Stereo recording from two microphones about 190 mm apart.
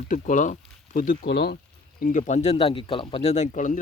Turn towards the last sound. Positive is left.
turn(degrees=40)  # may be behind; listen again after turning